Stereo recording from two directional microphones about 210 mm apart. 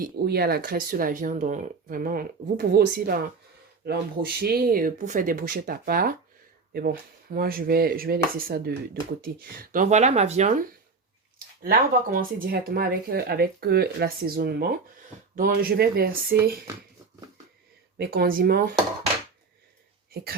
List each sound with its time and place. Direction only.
0.0 s speech: 50° right (ahead or behind)
7.3 s speech: 45° right (ahead or behind)
17.9 s speech: 50° right (ahead or behind)